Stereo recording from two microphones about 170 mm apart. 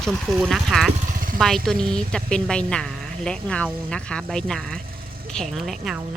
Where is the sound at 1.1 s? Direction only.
55° right (ahead or behind).